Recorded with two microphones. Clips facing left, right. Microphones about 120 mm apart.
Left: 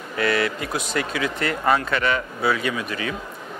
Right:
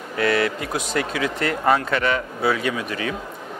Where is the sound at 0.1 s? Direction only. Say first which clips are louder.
Right 2 dB; 45° right (ahead or behind).